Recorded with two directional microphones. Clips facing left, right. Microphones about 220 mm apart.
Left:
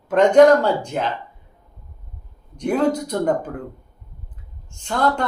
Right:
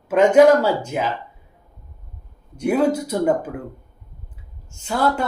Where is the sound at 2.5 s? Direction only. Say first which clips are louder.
Right 1 dB; 10° right (ahead or behind).